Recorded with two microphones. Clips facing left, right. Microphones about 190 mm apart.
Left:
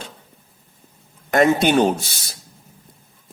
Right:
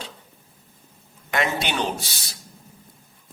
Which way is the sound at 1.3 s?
45° left (ahead or behind).